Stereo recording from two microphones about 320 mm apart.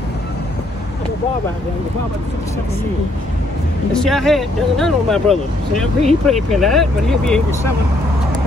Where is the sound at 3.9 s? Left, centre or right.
Centre.